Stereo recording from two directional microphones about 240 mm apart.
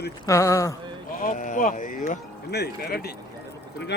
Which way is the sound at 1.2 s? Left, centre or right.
Left.